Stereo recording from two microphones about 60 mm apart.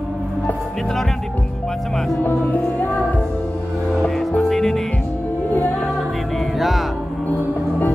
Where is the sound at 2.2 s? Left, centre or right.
Left.